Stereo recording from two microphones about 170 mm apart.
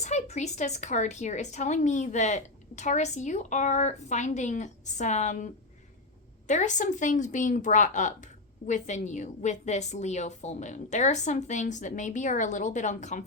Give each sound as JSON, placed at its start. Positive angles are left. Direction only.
{"t": 0.0, "sound": "speech", "side_deg": 40}
{"t": 6.5, "sound": "speech", "side_deg": 45}